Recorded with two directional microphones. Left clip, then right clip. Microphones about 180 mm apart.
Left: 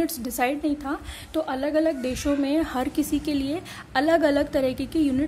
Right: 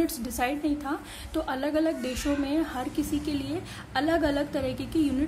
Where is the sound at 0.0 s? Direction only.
30° left (ahead or behind).